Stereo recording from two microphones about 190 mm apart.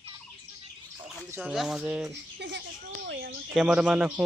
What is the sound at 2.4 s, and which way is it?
Speech, 65° right (ahead or behind).